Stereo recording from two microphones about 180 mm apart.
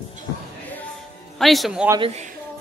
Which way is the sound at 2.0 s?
40° right (ahead or behind).